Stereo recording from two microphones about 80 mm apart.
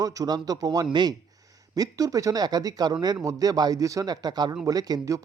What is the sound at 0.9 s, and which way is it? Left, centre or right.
Speech, right.